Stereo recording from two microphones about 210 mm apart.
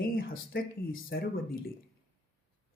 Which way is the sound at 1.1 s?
55° left (ahead or behind).